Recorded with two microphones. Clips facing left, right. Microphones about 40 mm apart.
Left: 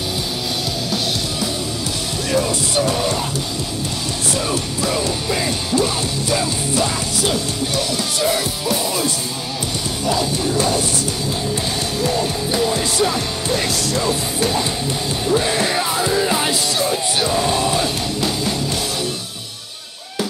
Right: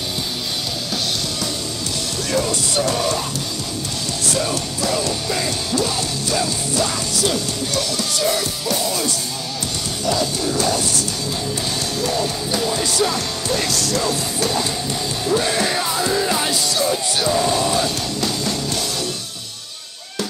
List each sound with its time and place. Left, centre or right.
2.3 s speech: centre
4.4 s music: centre
12.0 s music: centre